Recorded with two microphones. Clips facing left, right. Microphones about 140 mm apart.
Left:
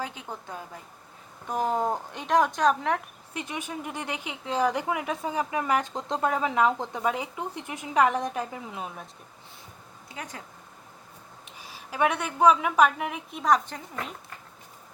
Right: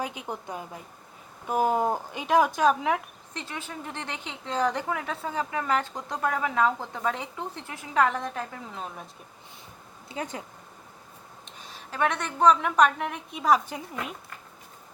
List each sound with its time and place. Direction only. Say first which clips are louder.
0.0 s a woman's voice: right 2 dB; 15° right (ahead or behind)
3.3 s a woman's voice: left 3 dB; 15° left (ahead or behind)
10.1 s speech: right 6 dB; 25° right (ahead or behind)
11.4 s a woman's voice: left 1 dB; 10° left (ahead or behind); by 14.1 s 10° right (ahead or behind)